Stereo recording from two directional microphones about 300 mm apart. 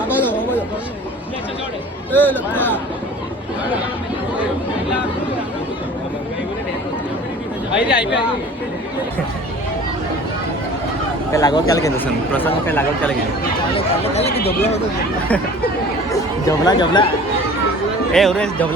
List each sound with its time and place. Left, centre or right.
0.1 s a sound: centre
2.1 s a man's voice: centre
7.8 s speech: centre
11.3 s a man's voice: centre
14.3 s speech: left
16.5 s a man's voice: centre
18.1 s speech: centre